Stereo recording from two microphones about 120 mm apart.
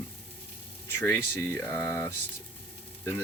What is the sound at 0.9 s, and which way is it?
Speech, 20° left (ahead or behind).